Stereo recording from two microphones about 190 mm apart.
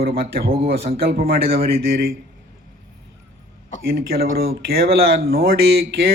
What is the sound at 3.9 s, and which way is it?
Speech, 55° right (ahead or behind).